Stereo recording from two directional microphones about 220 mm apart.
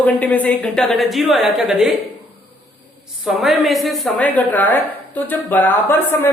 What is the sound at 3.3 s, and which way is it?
A woman's voice, centre (ahead or behind).